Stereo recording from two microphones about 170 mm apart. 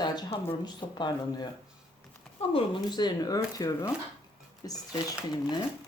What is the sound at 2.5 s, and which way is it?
Speech, 25° left (ahead or behind).